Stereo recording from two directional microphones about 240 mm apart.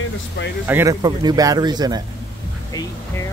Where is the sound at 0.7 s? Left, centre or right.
Centre.